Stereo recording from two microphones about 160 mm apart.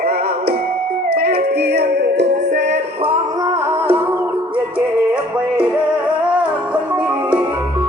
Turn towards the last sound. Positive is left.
turn(degrees=-10)  # may be behind; listen again after turning